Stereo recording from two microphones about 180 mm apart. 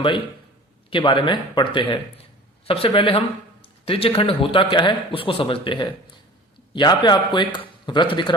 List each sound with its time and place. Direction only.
0.9 s speech: 30° left (ahead or behind)